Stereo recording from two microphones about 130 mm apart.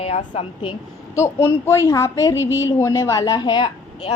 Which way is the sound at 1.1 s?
20° left (ahead or behind).